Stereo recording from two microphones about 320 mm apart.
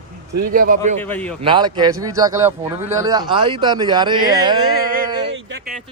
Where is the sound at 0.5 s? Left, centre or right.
Right.